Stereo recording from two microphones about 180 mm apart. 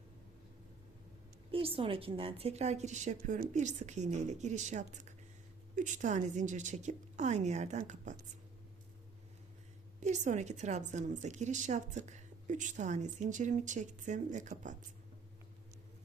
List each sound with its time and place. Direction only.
1.5 s a woman's voice: 30° right (ahead or behind)
10.0 s a woman's voice: 40° right (ahead or behind)